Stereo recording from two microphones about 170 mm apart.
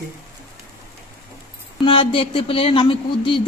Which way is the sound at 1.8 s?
30° left (ahead or behind).